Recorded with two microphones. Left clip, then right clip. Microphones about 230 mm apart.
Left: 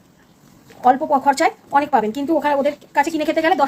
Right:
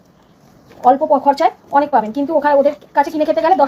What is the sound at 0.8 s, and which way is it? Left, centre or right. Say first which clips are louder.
Speech: right 3 dB; left.